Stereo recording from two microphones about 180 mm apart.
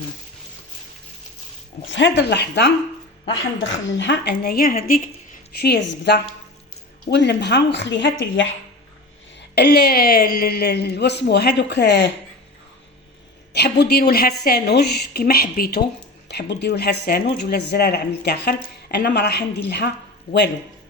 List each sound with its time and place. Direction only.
1.9 s speech: 85° left
3.6 s speech: 90° left; by 5.0 s 50° left (ahead or behind)
5.5 s speech: 65° left (ahead or behind); by 8.4 s 90° left
9.6 s speech: 65° left (ahead or behind)
13.5 s speech: 65° left (ahead or behind)
16.3 s speech: 65° left (ahead or behind)